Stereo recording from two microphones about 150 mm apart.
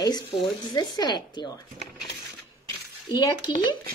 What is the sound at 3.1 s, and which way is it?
Speech, 30° left (ahead or behind).